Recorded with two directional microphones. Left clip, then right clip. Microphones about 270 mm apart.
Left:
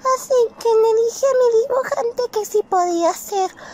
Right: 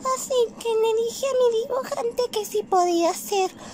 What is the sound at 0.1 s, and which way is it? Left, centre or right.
Child singing, centre.